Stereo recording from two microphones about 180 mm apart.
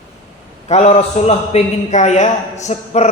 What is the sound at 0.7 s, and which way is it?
A man's voice, 35° left (ahead or behind).